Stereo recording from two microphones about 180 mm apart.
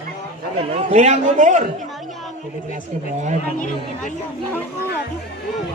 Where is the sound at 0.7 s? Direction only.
40° right (ahead or behind).